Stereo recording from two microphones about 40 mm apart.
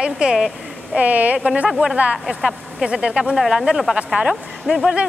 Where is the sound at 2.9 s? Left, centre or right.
Right.